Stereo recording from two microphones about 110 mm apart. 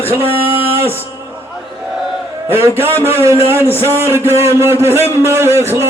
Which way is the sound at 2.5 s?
20° right (ahead or behind).